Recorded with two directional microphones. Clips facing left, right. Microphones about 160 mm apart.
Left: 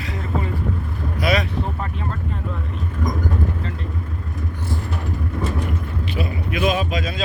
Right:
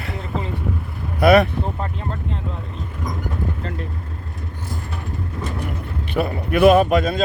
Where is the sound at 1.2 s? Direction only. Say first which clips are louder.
Right 8 dB; 60° right (ahead or behind).